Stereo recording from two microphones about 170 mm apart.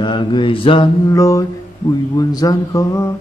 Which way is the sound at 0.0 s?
25° left (ahead or behind).